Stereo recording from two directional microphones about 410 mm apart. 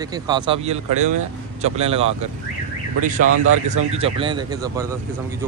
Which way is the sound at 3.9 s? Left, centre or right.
Centre.